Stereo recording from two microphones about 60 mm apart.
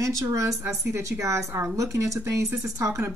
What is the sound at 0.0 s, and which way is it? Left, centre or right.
Speech, right.